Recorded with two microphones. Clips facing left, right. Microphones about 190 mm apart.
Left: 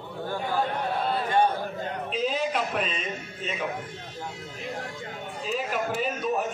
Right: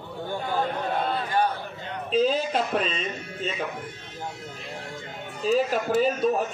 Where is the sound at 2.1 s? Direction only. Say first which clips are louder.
Right 6 dB; 30° right (ahead or behind).